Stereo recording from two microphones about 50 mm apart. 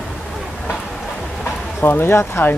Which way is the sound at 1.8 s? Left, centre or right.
Left.